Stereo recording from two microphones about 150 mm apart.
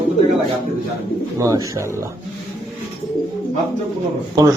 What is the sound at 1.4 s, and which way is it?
Speech, 20° right (ahead or behind).